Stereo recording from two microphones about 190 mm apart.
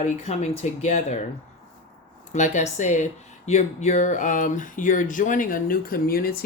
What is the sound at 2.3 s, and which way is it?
Speech, 40° left (ahead or behind).